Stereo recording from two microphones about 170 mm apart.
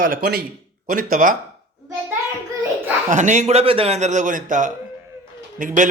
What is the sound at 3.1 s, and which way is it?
Speech, 45° right (ahead or behind).